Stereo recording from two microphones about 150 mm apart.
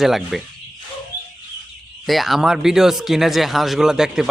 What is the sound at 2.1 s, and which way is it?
Speech, centre (ahead or behind).